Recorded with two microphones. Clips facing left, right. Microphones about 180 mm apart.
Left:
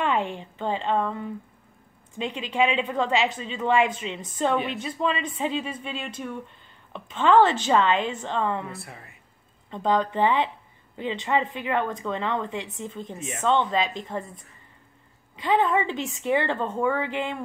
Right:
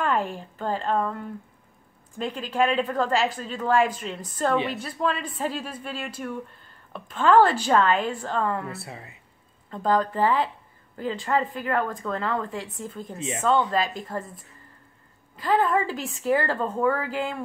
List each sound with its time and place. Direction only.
0.0 s speech: centre (ahead or behind)
15.3 s speech: 5° right (ahead or behind)